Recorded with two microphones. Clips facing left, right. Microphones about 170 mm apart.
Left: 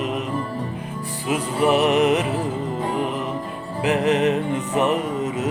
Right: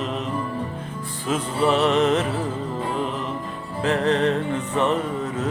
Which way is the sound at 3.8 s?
15° left (ahead or behind).